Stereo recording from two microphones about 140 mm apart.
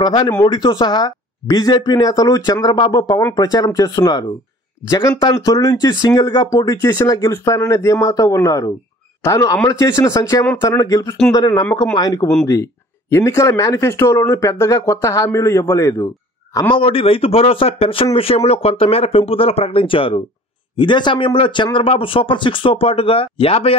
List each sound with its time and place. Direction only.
0.0 s speech: 30° left (ahead or behind)
16.7 s speech: 40° left (ahead or behind)